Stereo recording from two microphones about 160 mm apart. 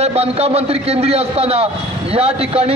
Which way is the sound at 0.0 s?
40° right (ahead or behind).